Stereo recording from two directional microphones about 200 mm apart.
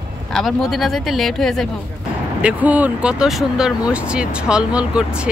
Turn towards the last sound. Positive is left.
turn(degrees=-5)  # may be behind; listen again after turning